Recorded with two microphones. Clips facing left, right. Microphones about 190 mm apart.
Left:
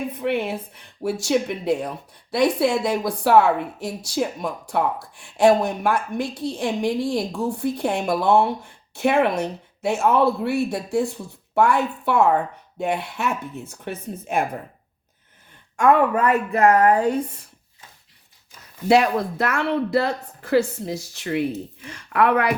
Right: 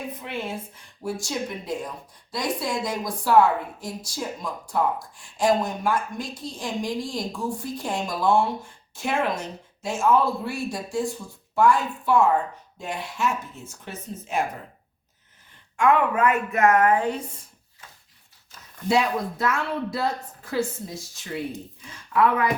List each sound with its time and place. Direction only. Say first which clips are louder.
0.2 s a woman's voice: left 8 dB; 65° left (ahead or behind)
15.7 s speech: left 3 dB; 45° left (ahead or behind)
18.9 s a woman's voice: left 5 dB; 65° left (ahead or behind)